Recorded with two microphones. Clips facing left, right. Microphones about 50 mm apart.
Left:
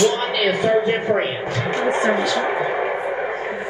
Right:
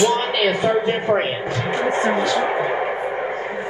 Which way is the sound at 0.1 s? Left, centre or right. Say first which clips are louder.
Right 1 dB; right.